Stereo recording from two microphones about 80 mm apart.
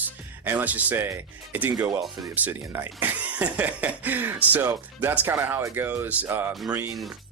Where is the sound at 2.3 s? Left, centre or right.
Right.